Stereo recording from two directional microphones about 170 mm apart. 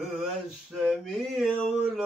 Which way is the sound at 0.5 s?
Centre (ahead or behind).